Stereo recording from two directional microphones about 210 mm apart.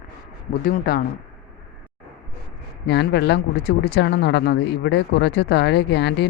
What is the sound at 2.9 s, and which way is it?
Speech, 55° left (ahead or behind).